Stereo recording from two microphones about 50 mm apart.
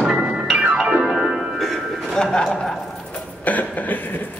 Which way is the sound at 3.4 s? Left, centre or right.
Left.